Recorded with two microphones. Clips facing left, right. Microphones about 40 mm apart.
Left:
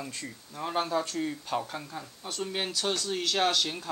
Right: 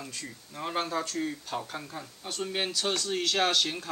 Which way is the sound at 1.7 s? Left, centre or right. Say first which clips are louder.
Even; centre.